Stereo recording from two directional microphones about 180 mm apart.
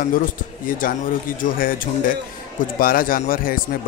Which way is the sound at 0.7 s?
50° left (ahead or behind).